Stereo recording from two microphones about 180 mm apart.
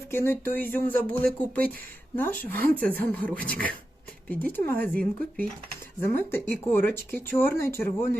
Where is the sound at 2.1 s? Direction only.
10° left (ahead or behind).